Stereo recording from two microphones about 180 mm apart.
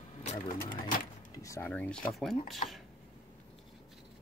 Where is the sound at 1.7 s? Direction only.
5° left (ahead or behind).